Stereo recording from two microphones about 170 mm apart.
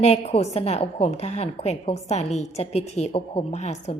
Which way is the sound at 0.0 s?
40° left (ahead or behind).